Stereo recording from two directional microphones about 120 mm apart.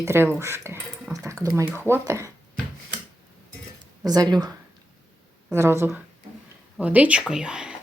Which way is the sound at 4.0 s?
35° right (ahead or behind).